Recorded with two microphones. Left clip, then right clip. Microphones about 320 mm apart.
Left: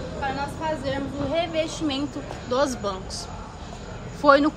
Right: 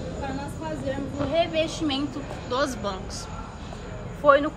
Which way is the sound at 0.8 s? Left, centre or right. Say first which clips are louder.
Left 1 dB; left.